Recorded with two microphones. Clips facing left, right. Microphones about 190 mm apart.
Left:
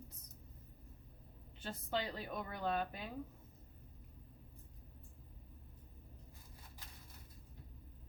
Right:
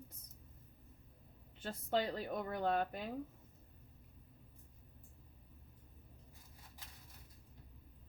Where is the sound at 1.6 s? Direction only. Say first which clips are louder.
Right 4 dB; 50° right (ahead or behind).